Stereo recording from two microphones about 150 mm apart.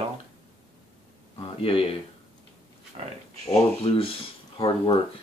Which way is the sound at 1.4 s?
35° left (ahead or behind).